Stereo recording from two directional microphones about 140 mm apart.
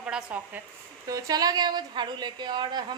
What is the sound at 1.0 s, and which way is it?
A woman's voice, 25° right (ahead or behind).